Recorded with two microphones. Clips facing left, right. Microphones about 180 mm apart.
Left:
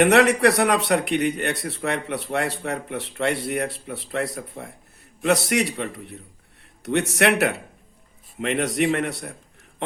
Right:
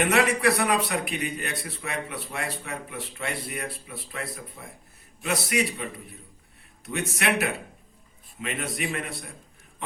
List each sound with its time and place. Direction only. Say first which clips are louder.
0.0 s a man's voice: left 6 dB; 70° left (ahead or behind)